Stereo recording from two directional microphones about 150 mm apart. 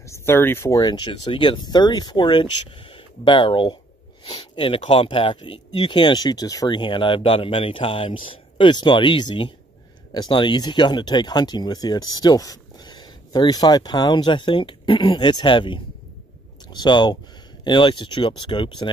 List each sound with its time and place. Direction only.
0.0 s speech: 15° left (ahead or behind)